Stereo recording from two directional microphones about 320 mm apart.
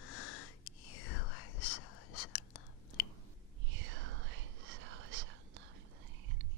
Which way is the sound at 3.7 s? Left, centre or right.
Right.